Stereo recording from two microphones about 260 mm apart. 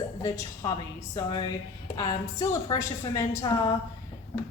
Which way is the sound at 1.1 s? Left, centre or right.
Centre.